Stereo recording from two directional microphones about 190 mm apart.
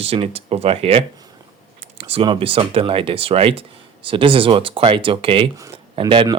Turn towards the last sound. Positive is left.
turn(degrees=-25)  # may be behind; listen again after turning